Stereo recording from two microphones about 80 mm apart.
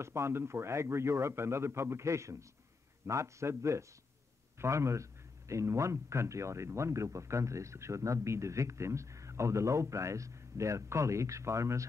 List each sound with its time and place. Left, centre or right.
0.0 s speech: right